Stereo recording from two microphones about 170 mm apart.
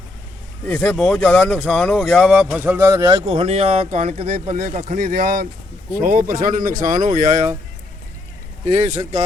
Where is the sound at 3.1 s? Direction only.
35° right (ahead or behind); by 7.5 s 50° right (ahead or behind).